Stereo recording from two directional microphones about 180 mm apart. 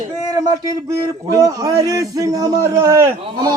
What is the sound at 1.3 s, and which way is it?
A man's voice, 20° right (ahead or behind).